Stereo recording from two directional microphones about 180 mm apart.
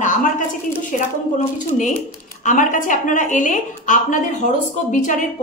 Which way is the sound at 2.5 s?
45° left (ahead or behind).